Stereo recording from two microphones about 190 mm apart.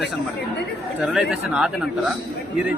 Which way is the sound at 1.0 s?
5° right (ahead or behind).